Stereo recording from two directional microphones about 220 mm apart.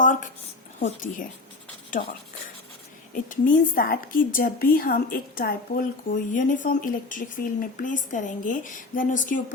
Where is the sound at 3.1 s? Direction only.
40° left (ahead or behind).